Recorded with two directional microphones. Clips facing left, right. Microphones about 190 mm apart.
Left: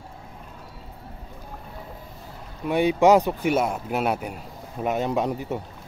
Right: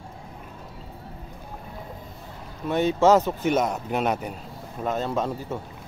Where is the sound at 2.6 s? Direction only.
10° left (ahead or behind).